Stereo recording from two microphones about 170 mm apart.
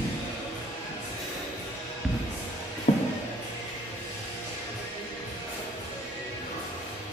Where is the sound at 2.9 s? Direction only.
45° left (ahead or behind).